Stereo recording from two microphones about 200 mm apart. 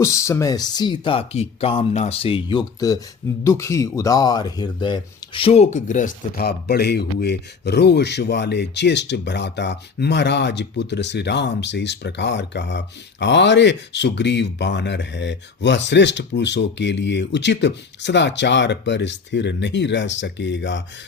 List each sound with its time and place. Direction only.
0.0 s speech: 15° left (ahead or behind); by 20.8 s 65° left (ahead or behind)